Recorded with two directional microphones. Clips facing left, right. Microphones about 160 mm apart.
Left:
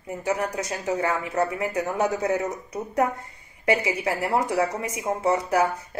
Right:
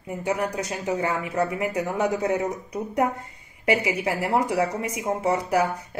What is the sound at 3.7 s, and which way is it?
Speech, 20° right (ahead or behind).